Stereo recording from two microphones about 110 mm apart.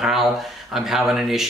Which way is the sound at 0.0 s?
5° right (ahead or behind).